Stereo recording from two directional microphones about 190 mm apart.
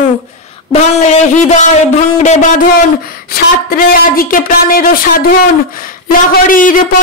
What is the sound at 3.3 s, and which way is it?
A woman's voice, 50° left (ahead or behind).